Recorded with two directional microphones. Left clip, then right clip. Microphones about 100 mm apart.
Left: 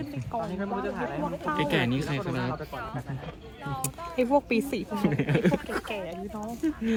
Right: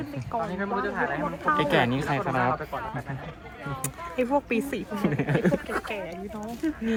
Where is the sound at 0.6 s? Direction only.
20° left (ahead or behind).